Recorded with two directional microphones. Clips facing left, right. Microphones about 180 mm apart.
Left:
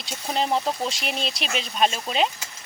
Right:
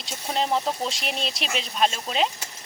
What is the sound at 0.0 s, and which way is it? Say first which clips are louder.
Speech: left 1 dB; 5° left (ahead or behind).